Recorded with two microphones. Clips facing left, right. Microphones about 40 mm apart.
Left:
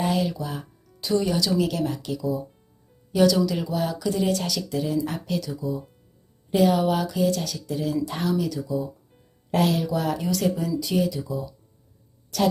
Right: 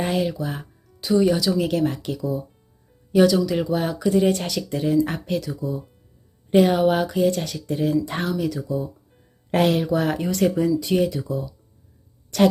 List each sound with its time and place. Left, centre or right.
0.0 s speech: right
0.9 s speech: centre
1.6 s speech: right
3.2 s speech: centre; by 7.9 s right
8.3 s speech: right
9.5 s speech: right